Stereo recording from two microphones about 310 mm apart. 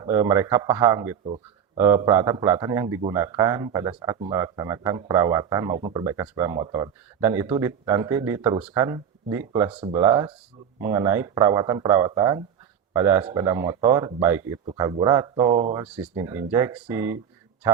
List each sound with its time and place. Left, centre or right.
0.0 s speech: centre